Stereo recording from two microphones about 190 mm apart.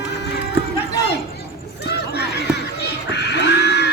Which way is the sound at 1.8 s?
60° left (ahead or behind).